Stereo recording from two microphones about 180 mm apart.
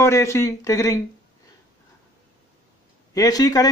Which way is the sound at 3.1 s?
20° left (ahead or behind).